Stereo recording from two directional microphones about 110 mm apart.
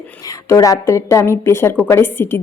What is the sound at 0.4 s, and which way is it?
A woman's voice, 30° left (ahead or behind).